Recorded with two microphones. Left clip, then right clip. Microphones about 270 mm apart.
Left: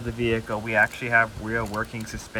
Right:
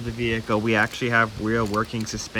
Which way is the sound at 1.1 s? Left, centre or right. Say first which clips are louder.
Even; right.